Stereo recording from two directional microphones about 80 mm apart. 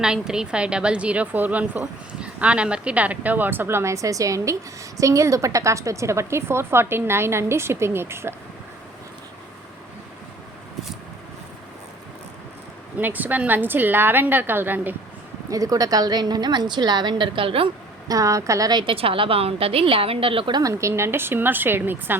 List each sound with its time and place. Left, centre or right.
0.0 s a woman's voice: centre; by 8.4 s right
13.0 s a woman's voice: right
15.4 s a woman's voice: right
18.1 s a woman's voice: right
18.7 s a woman's voice: right
20.3 s a woman's voice: right
20.6 s a woman's voice: right